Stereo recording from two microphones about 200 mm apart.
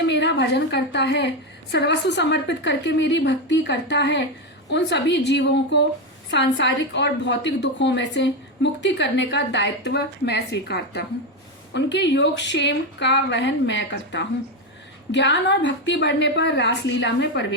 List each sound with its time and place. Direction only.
0.1 s a woman's voice: 60° left (ahead or behind)